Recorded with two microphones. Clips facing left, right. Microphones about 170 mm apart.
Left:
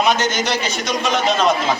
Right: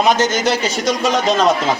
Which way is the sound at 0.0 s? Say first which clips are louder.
Right 3 dB; 40° right (ahead or behind).